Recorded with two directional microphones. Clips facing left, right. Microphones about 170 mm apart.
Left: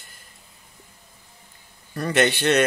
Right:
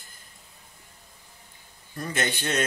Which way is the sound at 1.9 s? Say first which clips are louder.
Left 9 dB; 70° left (ahead or behind).